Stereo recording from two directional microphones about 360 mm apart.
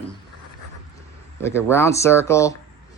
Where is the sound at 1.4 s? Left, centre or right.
Centre.